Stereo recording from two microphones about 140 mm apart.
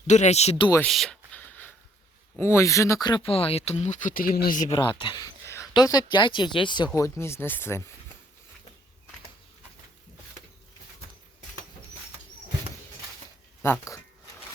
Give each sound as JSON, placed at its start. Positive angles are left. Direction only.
{"t": 0.1, "sound": "speech", "side_deg": 55}
{"t": 0.9, "sound": "a sound", "side_deg": 0}
{"t": 2.4, "sound": "speech", "side_deg": 20}
{"t": 4.7, "sound": "speech", "side_deg": 35}
{"t": 13.6, "sound": "speech", "side_deg": 20}